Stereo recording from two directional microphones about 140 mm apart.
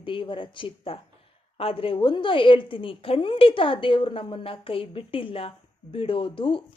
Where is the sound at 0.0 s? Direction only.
35° left (ahead or behind).